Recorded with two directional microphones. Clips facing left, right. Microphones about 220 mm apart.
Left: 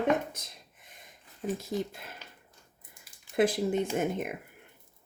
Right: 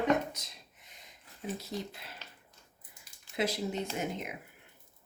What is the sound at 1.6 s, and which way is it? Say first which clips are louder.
Speech: left 6 dB; 50° left (ahead or behind).